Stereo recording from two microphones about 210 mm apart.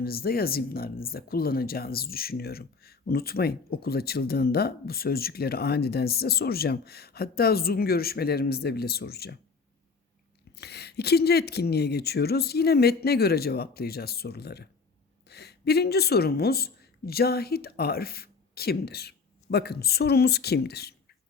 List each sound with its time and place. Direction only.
0.0 s speech: 45° left (ahead or behind)
10.5 s a woman's voice: 50° left (ahead or behind)